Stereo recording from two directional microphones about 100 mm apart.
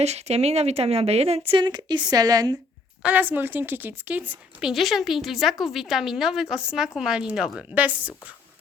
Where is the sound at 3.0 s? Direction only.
15° right (ahead or behind).